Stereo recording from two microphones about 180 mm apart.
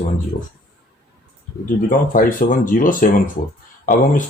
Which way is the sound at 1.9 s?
50° left (ahead or behind).